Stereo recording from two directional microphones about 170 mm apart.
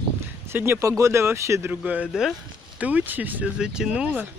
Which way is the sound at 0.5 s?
15° right (ahead or behind).